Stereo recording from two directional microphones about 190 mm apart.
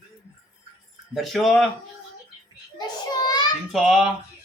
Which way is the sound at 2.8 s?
20° left (ahead or behind).